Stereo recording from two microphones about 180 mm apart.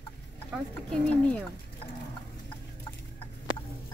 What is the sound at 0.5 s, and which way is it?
Speech, 5° right (ahead or behind).